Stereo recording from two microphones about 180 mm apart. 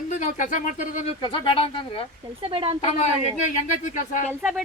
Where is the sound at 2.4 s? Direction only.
30° right (ahead or behind).